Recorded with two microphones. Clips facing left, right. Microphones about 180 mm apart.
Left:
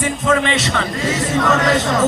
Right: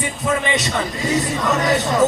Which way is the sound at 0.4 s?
15° right (ahead or behind).